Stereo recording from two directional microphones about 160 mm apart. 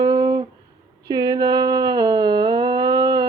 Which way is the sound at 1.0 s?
25° right (ahead or behind).